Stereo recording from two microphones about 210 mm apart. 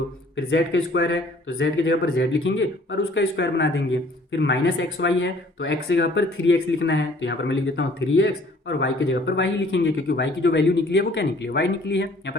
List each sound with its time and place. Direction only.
0.3 s speech: 60° left (ahead or behind)